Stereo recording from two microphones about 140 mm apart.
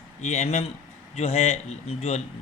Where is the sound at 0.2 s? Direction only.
55° left (ahead or behind).